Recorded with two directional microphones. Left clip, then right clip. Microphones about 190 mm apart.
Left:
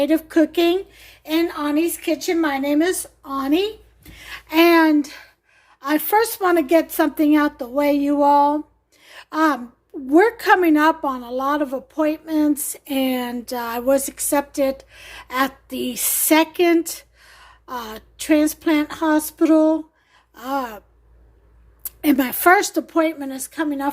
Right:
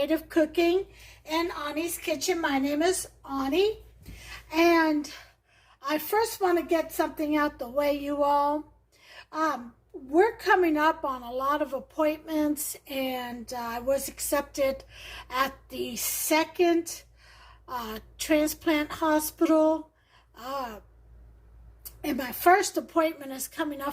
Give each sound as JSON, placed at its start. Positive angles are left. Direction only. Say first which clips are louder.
{"t": 0.0, "sound": "a woman's voice", "louder": "left 8 dB", "side_deg": 35}
{"t": 1.2, "sound": "a woman's voice", "louder": "left 8 dB", "side_deg": 60}
{"t": 9.0, "sound": "gasp", "louder": "left 9 dB", "side_deg": 45}
{"t": 10.1, "sound": "a woman's voice", "louder": "left 8 dB", "side_deg": 50}
{"t": 22.0, "sound": "a woman's voice", "louder": "left 8 dB", "side_deg": 45}